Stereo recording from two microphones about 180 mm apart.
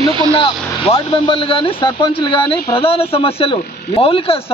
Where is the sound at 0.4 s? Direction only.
30° left (ahead or behind).